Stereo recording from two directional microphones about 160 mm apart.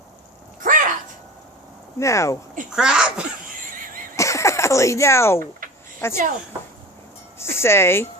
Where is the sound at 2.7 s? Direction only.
5° right (ahead or behind).